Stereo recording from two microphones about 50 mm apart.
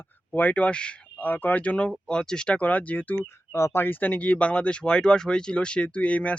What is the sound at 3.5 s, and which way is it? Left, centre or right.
Speech, left.